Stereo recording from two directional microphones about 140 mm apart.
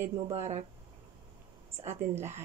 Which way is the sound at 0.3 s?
55° right (ahead or behind).